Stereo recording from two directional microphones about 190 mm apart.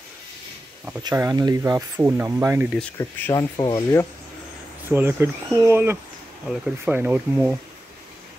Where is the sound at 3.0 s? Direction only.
15° left (ahead or behind).